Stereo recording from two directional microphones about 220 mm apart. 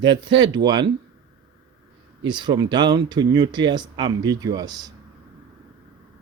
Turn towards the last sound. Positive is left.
turn(degrees=-15)  # may be behind; listen again after turning